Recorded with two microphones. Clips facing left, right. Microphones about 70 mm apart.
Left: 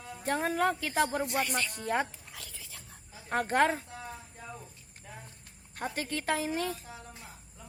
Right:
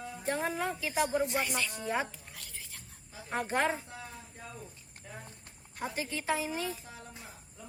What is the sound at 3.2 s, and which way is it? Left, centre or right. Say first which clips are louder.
Speech: left 4 dB; left.